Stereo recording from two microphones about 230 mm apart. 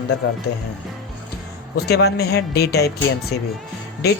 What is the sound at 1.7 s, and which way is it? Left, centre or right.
Speech, left.